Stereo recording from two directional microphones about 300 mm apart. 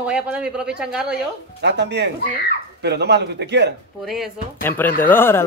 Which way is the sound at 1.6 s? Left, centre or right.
Right.